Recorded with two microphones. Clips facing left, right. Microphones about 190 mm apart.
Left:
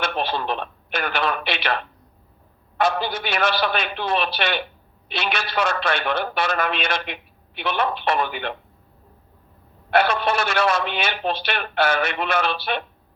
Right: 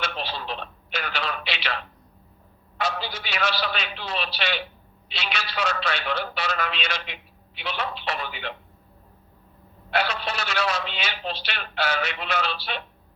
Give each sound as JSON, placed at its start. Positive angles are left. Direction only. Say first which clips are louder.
{"t": 0.0, "sound": "a sound", "louder": "left 7 dB", "side_deg": 55}
{"t": 2.7, "sound": "a man's voice", "louder": "left 7 dB", "side_deg": 55}
{"t": 9.9, "sound": "a man's voice", "louder": "left 7 dB", "side_deg": 55}